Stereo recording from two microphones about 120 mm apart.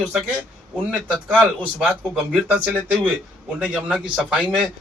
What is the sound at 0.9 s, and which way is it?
A man's voice, 10° right (ahead or behind).